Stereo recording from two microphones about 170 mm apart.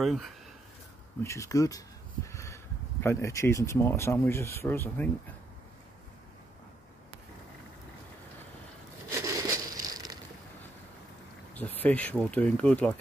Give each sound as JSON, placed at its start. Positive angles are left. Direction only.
{"t": 0.0, "sound": "speech", "side_deg": 0}
{"t": 1.2, "sound": "speech", "side_deg": 15}
{"t": 9.1, "sound": "a sound", "side_deg": -20}
{"t": 11.5, "sound": "speech", "side_deg": 10}